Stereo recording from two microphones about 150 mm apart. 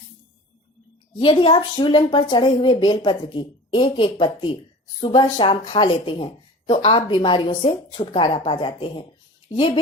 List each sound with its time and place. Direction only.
1.2 s speech: 35° left (ahead or behind)